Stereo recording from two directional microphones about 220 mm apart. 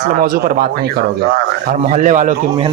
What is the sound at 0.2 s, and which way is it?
Speech, 40° right (ahead or behind).